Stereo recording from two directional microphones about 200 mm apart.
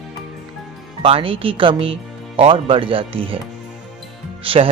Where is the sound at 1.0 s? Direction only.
25° right (ahead or behind).